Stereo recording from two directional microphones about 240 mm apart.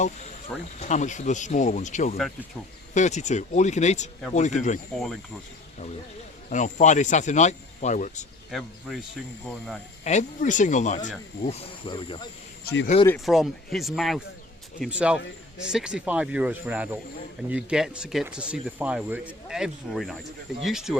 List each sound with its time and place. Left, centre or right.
0.8 s speech: left
2.1 s speech: centre
2.9 s speech: left
6.5 s speech: left
8.4 s speech: centre
10.0 s speech: left
12.6 s speech: left
13.1 s speech: centre